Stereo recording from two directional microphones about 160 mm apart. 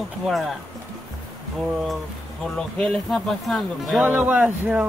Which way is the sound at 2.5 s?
5° left (ahead or behind).